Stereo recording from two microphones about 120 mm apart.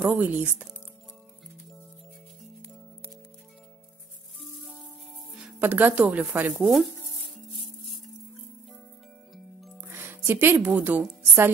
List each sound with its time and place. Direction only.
0.0 s speech: 15° right (ahead or behind)
5.6 s speech: 15° right (ahead or behind)
6.5 s speech: centre (ahead or behind)
7.5 s music: 50° left (ahead or behind)
9.8 s a woman's voice: 20° right (ahead or behind)